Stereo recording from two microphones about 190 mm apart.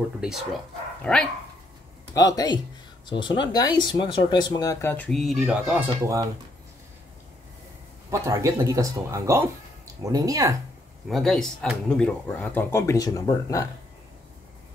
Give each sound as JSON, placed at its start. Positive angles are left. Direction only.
{"t": 0.2, "sound": "speech", "side_deg": -5}
{"t": 1.0, "sound": "speech", "side_deg": 5}
{"t": 2.1, "sound": "speech", "side_deg": 20}
{"t": 8.1, "sound": "speech", "side_deg": -15}
{"t": 11.1, "sound": "speech", "side_deg": 0}